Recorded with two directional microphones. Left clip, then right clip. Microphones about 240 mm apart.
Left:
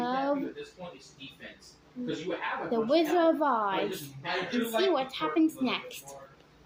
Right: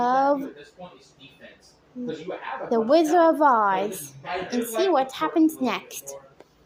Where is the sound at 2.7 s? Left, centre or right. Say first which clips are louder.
Right 8 dB; right.